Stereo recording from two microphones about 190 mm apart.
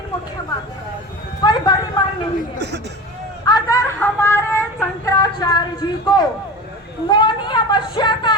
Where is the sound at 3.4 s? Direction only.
20° left (ahead or behind).